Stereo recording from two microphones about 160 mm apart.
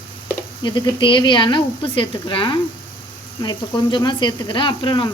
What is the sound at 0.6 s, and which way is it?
Speech, 30° left (ahead or behind).